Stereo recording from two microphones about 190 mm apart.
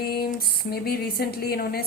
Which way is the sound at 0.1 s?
55° left (ahead or behind).